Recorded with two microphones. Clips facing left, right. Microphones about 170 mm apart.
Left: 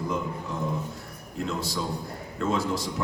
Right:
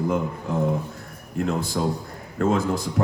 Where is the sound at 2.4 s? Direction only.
50° right (ahead or behind).